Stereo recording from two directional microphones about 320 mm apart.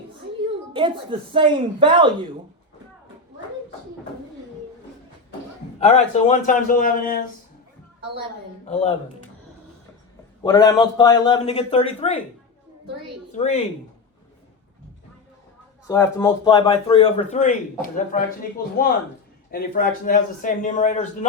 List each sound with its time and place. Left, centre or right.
0.7 s speech: centre
5.8 s a man's voice: left
8.6 s a man's voice: centre
10.4 s a man's voice: centre
13.3 s a man's voice: left
15.9 s a man's voice: centre; by 18.2 s left
19.5 s a man's voice: left